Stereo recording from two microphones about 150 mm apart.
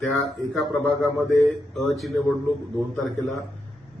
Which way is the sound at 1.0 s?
20° right (ahead or behind).